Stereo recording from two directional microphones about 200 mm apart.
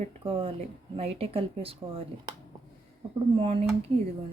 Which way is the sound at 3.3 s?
25° right (ahead or behind).